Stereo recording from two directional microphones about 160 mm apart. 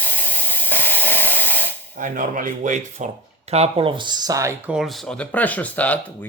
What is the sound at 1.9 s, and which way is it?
Speech, 55° right (ahead or behind).